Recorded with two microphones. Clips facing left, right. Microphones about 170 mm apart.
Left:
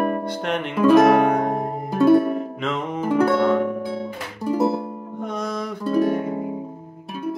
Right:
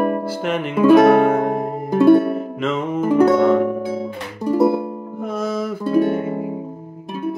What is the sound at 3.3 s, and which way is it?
Harp, centre (ahead or behind).